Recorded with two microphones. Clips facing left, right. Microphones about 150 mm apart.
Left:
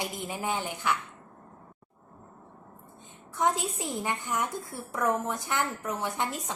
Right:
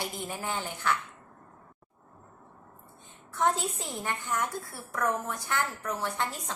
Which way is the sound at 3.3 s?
15° left (ahead or behind).